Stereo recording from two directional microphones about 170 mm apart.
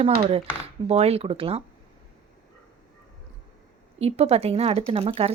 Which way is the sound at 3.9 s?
35° right (ahead or behind).